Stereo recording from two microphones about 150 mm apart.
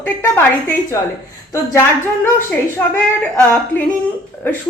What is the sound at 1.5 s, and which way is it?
A woman's voice, 20° left (ahead or behind).